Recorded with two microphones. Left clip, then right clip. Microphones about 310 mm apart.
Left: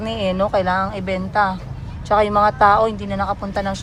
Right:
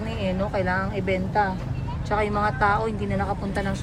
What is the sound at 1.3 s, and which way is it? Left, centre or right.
Speech, centre.